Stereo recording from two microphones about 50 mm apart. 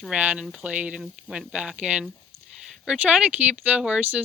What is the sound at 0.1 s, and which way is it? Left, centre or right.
Speech, right.